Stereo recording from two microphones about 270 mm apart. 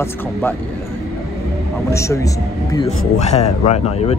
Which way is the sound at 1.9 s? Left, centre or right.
Centre.